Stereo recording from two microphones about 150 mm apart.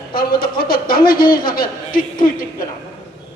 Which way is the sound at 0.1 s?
75° left (ahead or behind).